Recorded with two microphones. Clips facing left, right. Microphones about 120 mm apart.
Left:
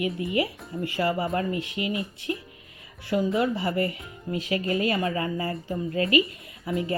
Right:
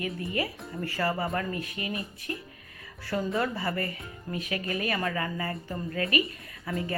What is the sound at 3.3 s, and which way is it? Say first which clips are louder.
Speech: left 5 dB; 25° left (ahead or behind).